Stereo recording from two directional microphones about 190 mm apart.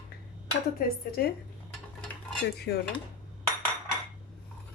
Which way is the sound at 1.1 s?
55° left (ahead or behind).